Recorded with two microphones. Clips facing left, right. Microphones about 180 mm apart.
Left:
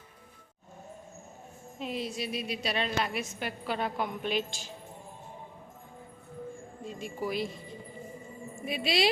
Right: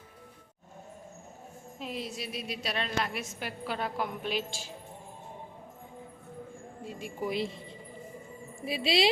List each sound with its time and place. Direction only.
1.8 s a woman's voice: centre (ahead or behind)
6.8 s a sound: 10° right (ahead or behind)
7.3 s speech: 25° right (ahead or behind)